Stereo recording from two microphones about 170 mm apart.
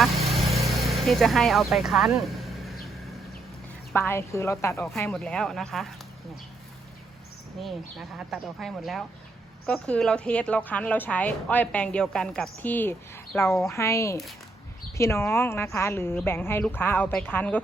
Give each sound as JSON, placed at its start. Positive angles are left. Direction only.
{"t": 0.0, "sound": "vehicle", "side_deg": 0}
{"t": 0.8, "sound": "speech", "side_deg": 0}
{"t": 3.9, "sound": "a woman's voice", "side_deg": 15}
{"t": 5.1, "sound": "speech", "side_deg": 5}
{"t": 7.6, "sound": "a woman's voice", "side_deg": 0}